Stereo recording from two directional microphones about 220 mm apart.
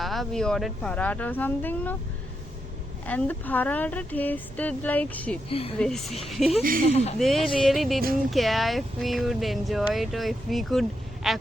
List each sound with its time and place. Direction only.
0.0 s speech: centre (ahead or behind)
3.1 s speech: 5° left (ahead or behind)
5.5 s speech: 25° left (ahead or behind)
5.8 s speech: centre (ahead or behind)